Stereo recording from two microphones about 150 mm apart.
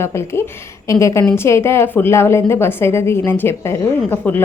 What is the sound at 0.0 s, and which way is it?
A woman's voice, 15° left (ahead or behind).